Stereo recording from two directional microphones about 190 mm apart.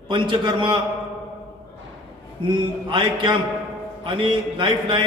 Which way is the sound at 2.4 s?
25° right (ahead or behind).